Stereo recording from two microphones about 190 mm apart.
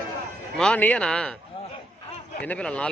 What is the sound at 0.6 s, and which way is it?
Speech, 5° left (ahead or behind).